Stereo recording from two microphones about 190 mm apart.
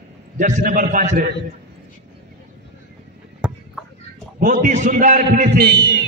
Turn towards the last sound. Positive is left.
turn(degrees=-20)  # may be behind; listen again after turning